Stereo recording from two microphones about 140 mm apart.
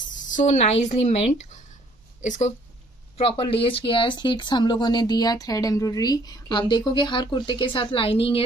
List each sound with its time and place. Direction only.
0.1 s speech: 65° left (ahead or behind)
3.2 s speech: 40° left (ahead or behind)